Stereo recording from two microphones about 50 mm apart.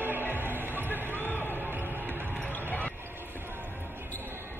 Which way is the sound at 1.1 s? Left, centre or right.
Left.